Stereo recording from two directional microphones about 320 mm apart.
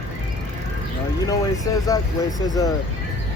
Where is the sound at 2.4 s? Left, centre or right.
Centre.